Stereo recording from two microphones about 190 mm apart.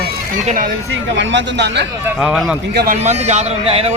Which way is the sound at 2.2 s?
Centre (ahead or behind).